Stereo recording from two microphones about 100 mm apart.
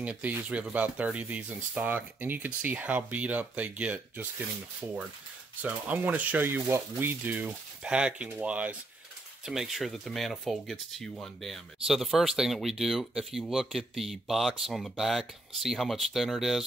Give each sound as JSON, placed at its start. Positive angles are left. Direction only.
{"t": 0.0, "sound": "speech", "side_deg": -15}
{"t": 5.6, "sound": "speech", "side_deg": -15}